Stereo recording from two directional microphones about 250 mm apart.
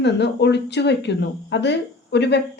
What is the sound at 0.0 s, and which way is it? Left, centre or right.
Speech, left.